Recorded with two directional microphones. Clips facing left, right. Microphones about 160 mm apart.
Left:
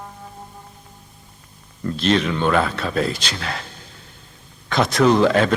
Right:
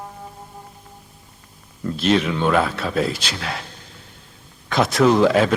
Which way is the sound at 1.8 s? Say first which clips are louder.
Even; 5° right (ahead or behind).